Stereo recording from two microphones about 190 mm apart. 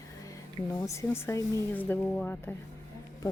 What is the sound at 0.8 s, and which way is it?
Speech, 15° left (ahead or behind).